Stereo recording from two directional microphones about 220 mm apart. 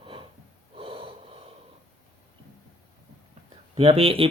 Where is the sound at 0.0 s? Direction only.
25° right (ahead or behind).